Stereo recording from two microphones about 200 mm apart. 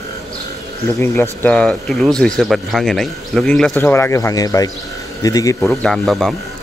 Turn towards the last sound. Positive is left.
turn(degrees=0)  # may be behind; listen again after turning